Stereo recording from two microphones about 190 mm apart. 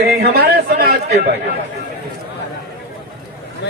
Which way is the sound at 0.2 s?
55° right (ahead or behind).